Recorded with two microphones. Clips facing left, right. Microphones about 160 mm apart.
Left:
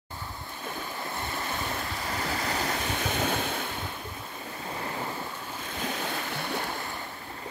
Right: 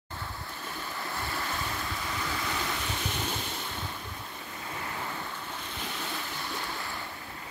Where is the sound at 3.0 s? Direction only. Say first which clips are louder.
Left 6 dB; 65° left (ahead or behind).